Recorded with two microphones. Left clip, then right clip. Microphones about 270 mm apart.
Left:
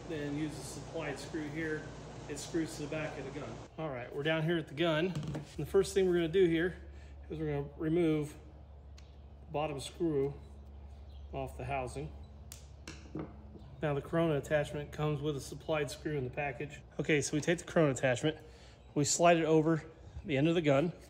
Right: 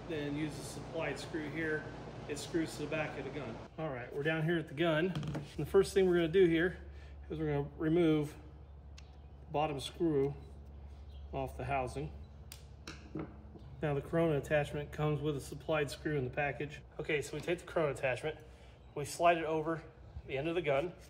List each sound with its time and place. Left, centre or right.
0.1 s speech: centre
9.5 s speech: centre
11.3 s speech: centre
13.7 s speech: centre
16.9 s a man's voice: left